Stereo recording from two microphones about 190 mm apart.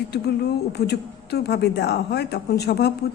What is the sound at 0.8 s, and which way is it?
A woman's voice, 60° left (ahead or behind).